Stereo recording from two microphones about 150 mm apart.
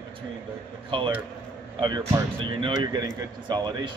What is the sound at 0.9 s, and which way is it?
Speech, 35° right (ahead or behind).